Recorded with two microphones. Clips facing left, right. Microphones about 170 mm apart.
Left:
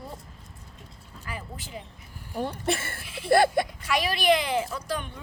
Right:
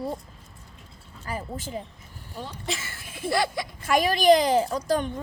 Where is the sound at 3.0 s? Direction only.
50° right (ahead or behind).